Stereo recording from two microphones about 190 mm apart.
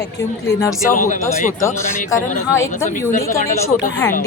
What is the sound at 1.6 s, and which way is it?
Speech, 15° left (ahead or behind).